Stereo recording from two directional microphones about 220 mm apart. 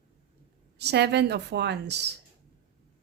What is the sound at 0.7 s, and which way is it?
Speech, 50° right (ahead or behind).